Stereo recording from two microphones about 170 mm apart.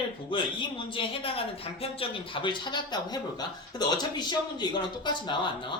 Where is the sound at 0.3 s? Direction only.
30° left (ahead or behind).